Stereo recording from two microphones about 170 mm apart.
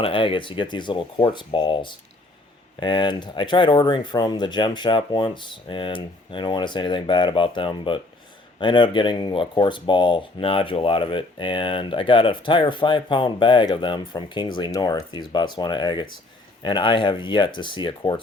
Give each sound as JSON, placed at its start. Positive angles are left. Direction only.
{"t": 0.0, "sound": "speech", "side_deg": 30}